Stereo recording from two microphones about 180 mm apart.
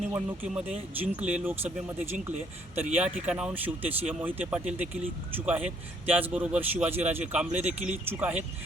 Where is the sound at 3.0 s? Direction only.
5° right (ahead or behind).